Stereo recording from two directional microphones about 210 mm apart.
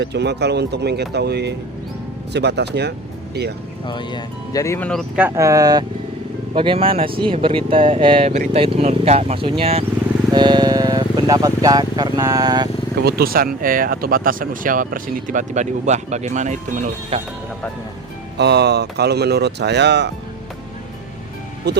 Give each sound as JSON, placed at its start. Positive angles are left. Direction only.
{"t": 0.0, "sound": "speech", "side_deg": -55}
{"t": 3.8, "sound": "speech", "side_deg": 20}
{"t": 5.3, "sound": "speech", "side_deg": -15}
{"t": 13.0, "sound": "speech", "side_deg": -50}
{"t": 18.3, "sound": "speech", "side_deg": -50}
{"t": 21.7, "sound": "speech", "side_deg": -50}